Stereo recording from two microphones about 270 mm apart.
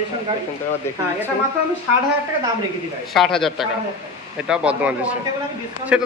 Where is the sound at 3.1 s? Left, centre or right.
Centre.